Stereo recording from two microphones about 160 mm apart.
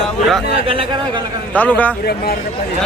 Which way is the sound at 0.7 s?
30° right (ahead or behind).